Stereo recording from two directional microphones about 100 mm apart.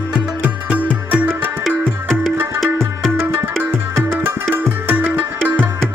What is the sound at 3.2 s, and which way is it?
Tabla, 15° right (ahead or behind).